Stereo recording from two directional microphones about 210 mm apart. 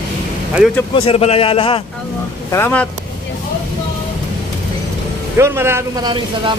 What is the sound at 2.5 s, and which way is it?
Speech, 10° left (ahead or behind).